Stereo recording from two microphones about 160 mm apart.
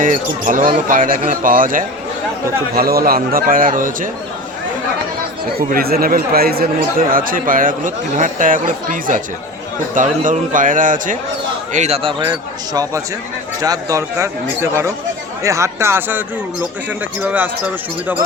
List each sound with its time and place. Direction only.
0.0 s speech: 55° right (ahead or behind)
5.7 s speech: 70° right (ahead or behind)
11.7 s speech: 45° right (ahead or behind); by 17.5 s 10° right (ahead or behind)